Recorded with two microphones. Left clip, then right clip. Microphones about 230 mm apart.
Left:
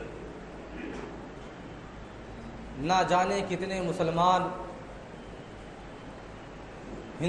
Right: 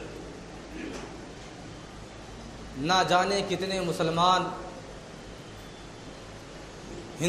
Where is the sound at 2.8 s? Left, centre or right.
Right.